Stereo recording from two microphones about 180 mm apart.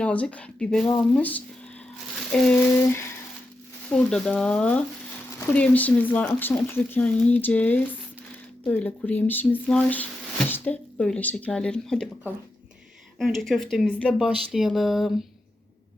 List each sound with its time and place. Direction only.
0.0 s speech: 5° left (ahead or behind)
2.9 s speech: 15° left (ahead or behind)
3.9 s speech: 5° left (ahead or behind)